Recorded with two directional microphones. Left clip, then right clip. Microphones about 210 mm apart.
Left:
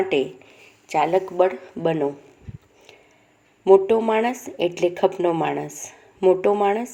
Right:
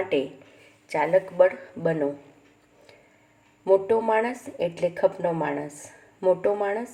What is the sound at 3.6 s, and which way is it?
A woman's voice, 20° left (ahead or behind).